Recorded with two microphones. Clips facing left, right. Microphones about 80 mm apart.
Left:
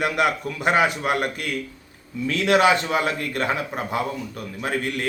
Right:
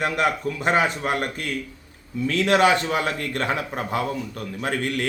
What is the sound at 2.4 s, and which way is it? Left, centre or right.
A man's voice, centre.